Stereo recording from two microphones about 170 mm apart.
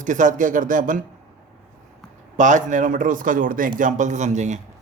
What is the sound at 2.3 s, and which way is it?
Speech, 45° right (ahead or behind).